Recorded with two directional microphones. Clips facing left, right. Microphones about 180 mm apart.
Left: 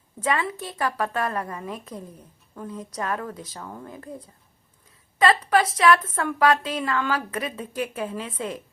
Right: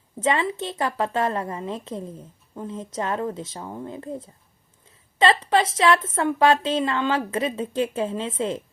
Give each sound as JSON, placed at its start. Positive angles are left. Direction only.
{"t": 0.2, "sound": "a woman's voice", "side_deg": -25}